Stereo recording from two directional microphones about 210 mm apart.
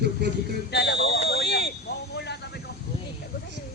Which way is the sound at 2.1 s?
50° left (ahead or behind).